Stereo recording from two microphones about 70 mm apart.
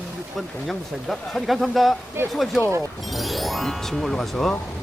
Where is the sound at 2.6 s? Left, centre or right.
Right.